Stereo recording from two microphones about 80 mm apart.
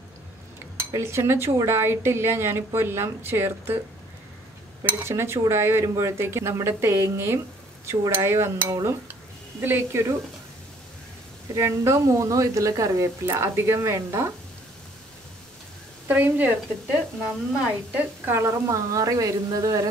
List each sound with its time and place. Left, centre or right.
0.9 s a woman's voice: right
4.8 s a woman's voice: right
9.6 s a woman's voice: right
11.5 s a woman's voice: right
16.1 s a woman's voice: right